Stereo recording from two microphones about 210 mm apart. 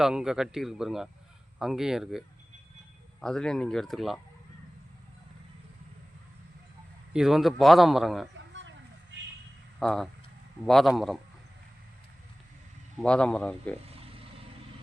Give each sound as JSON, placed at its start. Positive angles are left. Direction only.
{"t": 0.0, "sound": "a man's voice", "side_deg": -5}
{"t": 7.1, "sound": "a man's voice", "side_deg": 0}
{"t": 9.8, "sound": "a man's voice", "side_deg": 0}
{"t": 13.0, "sound": "a man's voice", "side_deg": 5}